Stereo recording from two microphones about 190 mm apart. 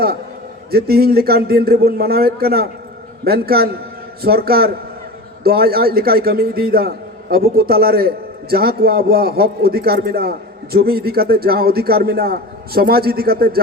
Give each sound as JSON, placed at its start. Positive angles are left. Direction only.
{"t": 0.7, "sound": "a man's voice", "side_deg": -55}